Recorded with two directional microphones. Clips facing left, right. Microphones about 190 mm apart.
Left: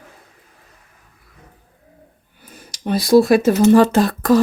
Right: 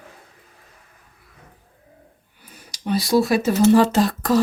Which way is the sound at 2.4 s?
50° left (ahead or behind).